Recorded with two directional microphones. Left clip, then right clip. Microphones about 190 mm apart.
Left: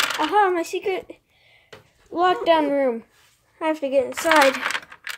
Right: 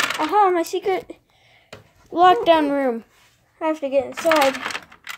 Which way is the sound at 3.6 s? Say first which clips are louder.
Even; 35° left (ahead or behind).